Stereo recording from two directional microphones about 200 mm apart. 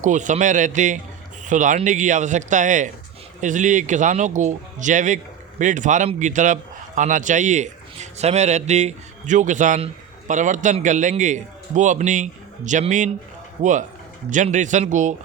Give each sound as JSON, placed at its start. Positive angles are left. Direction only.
{"t": 0.0, "sound": "speech", "side_deg": -40}